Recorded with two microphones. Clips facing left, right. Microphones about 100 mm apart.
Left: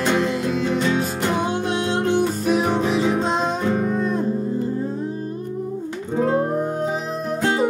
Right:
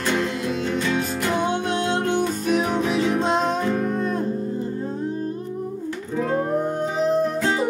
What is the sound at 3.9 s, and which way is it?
Music, centre (ahead or behind).